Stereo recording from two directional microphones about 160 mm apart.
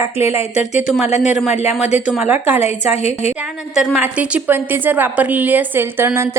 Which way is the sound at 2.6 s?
40° left (ahead or behind).